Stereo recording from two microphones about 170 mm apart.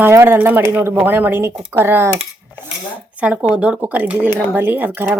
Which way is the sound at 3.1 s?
10° right (ahead or behind).